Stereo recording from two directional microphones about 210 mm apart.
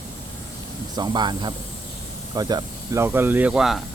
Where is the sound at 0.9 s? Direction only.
20° right (ahead or behind).